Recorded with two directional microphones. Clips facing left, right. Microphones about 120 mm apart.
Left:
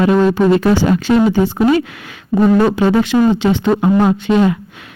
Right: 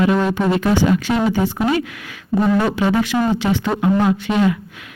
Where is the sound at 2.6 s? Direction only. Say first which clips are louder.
Left 5 dB; 30° left (ahead or behind).